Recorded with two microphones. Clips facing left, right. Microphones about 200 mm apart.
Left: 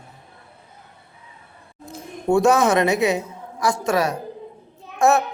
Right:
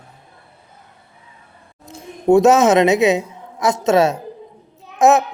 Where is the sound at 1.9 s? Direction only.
20° right (ahead or behind).